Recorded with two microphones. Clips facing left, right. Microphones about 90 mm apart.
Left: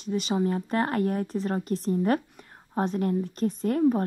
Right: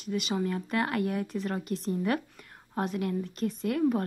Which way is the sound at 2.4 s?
25° left (ahead or behind).